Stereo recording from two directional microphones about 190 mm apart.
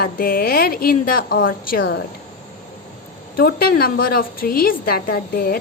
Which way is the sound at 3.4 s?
50° left (ahead or behind).